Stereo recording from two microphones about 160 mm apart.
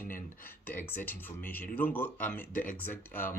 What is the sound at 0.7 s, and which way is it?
Speech, 10° left (ahead or behind).